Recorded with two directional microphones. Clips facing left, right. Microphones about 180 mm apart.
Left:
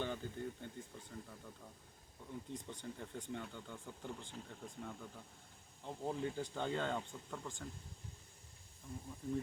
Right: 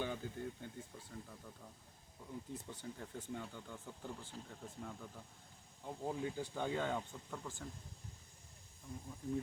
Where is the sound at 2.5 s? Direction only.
5° right (ahead or behind).